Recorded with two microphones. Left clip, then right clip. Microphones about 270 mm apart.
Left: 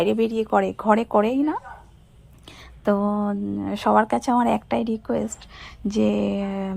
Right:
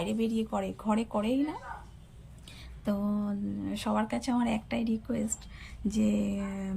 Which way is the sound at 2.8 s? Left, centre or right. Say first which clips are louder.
Left 12 dB; left.